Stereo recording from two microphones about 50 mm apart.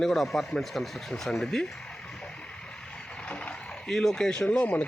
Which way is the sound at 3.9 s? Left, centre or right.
Centre.